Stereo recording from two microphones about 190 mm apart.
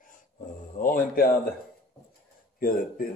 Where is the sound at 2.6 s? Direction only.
50° left (ahead or behind).